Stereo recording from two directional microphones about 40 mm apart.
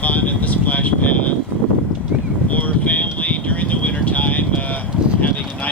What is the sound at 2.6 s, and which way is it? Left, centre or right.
Vehicle, left.